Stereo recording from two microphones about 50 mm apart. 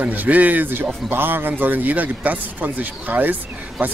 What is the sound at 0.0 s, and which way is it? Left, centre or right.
Speech, right.